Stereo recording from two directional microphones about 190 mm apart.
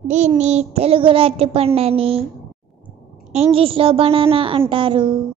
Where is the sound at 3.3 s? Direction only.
30° right (ahead or behind).